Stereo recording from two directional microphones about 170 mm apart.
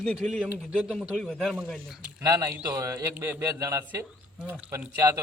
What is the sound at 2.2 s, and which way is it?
A man's voice, 20° right (ahead or behind).